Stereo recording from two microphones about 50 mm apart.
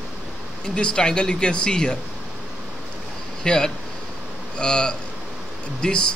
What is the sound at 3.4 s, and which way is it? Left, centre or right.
A man's voice, centre.